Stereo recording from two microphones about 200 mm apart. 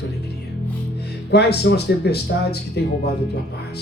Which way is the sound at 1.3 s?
55° left (ahead or behind).